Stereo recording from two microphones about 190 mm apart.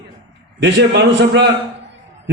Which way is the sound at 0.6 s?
65° right (ahead or behind).